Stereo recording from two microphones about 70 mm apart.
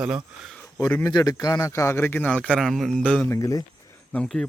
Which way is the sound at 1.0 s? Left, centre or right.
Left.